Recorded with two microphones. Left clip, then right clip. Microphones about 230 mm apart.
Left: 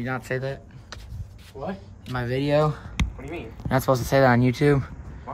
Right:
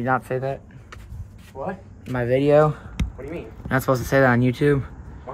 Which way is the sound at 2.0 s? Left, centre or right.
Centre.